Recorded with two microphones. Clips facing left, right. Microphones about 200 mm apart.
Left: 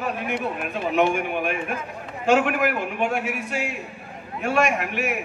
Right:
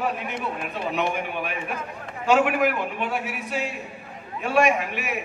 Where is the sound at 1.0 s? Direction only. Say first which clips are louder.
Left 7 dB; 50° left (ahead or behind).